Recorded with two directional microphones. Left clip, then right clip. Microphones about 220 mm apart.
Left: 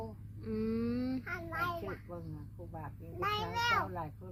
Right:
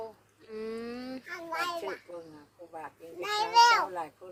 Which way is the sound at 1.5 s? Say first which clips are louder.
Right 4 dB; 40° right (ahead or behind).